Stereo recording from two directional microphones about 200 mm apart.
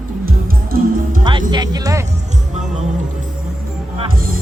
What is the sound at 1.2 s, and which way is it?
Music, 20° right (ahead or behind).